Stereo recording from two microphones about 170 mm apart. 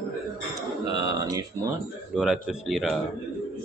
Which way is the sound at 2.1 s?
5° right (ahead or behind).